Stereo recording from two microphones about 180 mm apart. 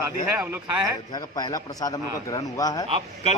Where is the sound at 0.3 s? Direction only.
10° right (ahead or behind).